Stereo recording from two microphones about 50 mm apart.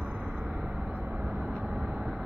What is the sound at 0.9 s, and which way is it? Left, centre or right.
Vehicle, right.